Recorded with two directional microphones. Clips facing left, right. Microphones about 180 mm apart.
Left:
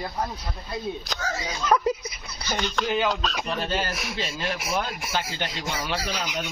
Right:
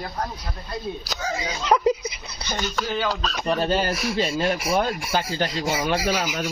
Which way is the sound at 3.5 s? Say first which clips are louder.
Right 8 dB; 40° right (ahead or behind).